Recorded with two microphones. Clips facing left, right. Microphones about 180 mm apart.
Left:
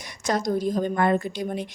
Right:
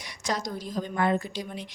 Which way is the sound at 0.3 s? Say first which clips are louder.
Left 8 dB; 50° left (ahead or behind).